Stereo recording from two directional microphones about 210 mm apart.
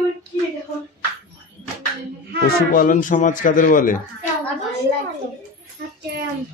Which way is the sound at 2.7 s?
40° left (ahead or behind).